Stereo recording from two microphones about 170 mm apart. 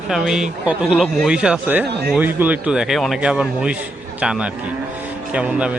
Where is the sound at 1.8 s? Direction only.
75° right (ahead or behind).